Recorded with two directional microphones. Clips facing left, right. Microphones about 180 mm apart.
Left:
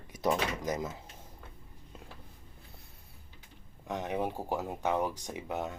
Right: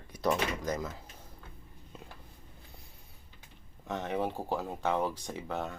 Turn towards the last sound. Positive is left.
turn(degrees=15)  # may be behind; listen again after turning